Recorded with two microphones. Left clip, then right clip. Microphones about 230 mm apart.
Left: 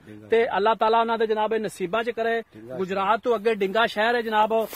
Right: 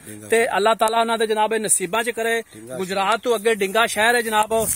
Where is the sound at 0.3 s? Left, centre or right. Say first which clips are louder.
Right 3 dB; right.